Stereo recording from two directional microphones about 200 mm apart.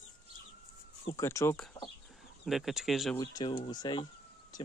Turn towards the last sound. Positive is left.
turn(degrees=20)  # may be behind; listen again after turning